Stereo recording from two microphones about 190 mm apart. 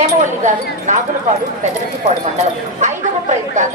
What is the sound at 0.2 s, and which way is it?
Speech, 40° right (ahead or behind).